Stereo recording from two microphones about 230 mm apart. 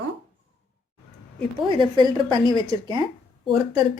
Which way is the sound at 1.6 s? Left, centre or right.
Right.